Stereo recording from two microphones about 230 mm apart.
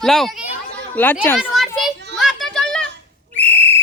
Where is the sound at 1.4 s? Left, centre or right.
Centre.